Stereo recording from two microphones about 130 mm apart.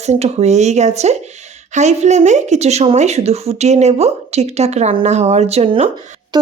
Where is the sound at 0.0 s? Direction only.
55° right (ahead or behind).